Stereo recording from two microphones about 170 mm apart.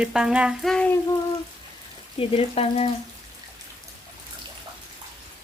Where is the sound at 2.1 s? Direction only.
35° left (ahead or behind).